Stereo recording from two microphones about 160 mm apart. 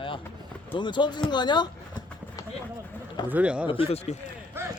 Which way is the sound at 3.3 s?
10° right (ahead or behind).